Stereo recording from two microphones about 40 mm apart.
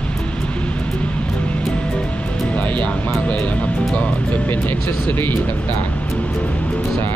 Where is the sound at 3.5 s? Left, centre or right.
Left.